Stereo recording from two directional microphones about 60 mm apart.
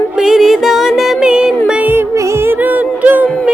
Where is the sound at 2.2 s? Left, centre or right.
Right.